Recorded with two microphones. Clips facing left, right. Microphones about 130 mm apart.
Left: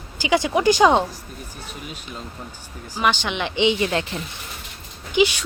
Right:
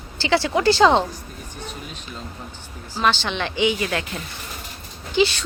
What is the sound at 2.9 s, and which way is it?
Speech, 15° left (ahead or behind).